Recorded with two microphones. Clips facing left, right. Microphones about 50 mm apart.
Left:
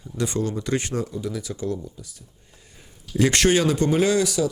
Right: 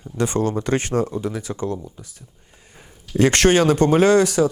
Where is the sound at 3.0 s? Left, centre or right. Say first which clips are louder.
Right 4 dB; right.